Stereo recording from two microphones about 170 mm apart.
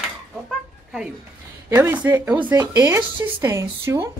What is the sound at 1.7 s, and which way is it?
Speech, 10° right (ahead or behind).